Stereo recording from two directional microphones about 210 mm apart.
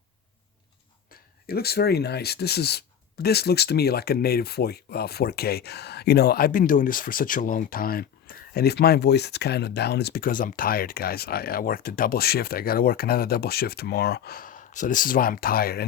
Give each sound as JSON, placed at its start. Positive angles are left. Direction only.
{"t": 1.5, "sound": "speech", "side_deg": 50}